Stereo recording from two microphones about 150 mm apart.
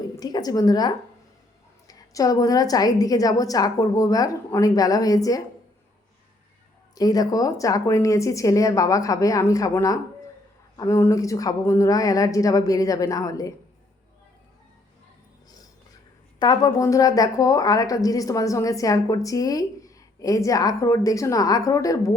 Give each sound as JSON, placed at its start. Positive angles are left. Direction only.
{"t": 0.2, "sound": "a woman's voice", "side_deg": 25}
{"t": 6.9, "sound": "a woman's voice", "side_deg": 25}
{"t": 16.4, "sound": "a woman's voice", "side_deg": 25}